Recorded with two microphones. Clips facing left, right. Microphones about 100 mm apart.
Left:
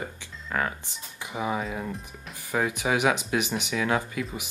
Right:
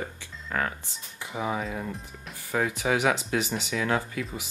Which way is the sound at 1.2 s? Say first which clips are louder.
Left 1 dB; 15° left (ahead or behind).